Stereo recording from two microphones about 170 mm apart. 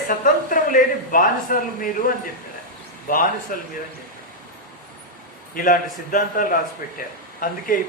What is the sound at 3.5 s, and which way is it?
Speech, 55° left (ahead or behind).